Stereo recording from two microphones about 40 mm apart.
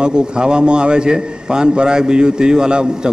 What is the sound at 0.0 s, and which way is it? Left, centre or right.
A man's voice, right.